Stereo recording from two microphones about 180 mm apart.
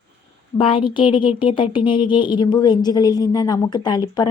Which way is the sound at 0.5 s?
30° left (ahead or behind).